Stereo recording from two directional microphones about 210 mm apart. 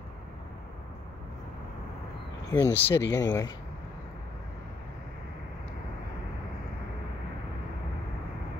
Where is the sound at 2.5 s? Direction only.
10° left (ahead or behind).